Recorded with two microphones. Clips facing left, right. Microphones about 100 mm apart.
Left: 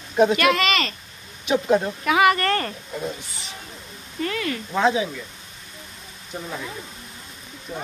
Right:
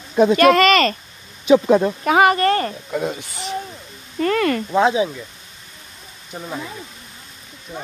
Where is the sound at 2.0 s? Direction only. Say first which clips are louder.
Right 4 dB; 35° right (ahead or behind).